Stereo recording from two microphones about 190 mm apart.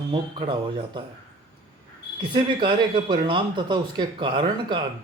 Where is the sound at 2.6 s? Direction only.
25° right (ahead or behind).